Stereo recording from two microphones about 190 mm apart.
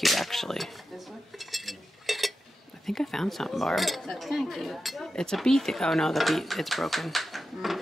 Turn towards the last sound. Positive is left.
turn(degrees=0)  # may be behind; listen again after turning